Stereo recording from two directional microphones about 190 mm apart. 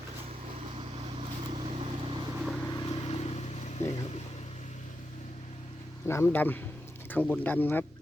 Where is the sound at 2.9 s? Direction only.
35° left (ahead or behind).